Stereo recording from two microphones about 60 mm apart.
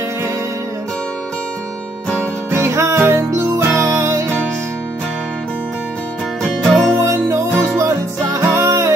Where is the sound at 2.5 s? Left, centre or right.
Right.